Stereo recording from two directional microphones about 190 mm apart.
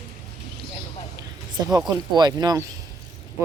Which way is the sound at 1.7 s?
20° right (ahead or behind).